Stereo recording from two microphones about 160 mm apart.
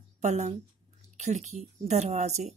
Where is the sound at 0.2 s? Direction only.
45° right (ahead or behind).